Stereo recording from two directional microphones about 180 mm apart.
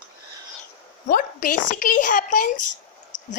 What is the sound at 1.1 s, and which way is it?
A woman's voice, 50° left (ahead or behind).